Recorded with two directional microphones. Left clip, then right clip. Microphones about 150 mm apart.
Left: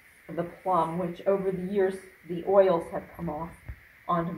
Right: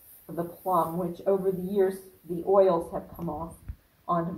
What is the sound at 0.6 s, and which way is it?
Speech, 10° left (ahead or behind).